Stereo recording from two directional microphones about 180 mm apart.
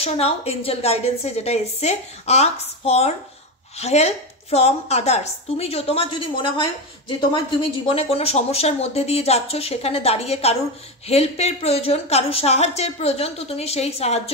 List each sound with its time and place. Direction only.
0.0 s a woman's voice: 35° left (ahead or behind)